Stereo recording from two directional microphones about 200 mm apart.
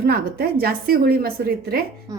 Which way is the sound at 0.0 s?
50° right (ahead or behind).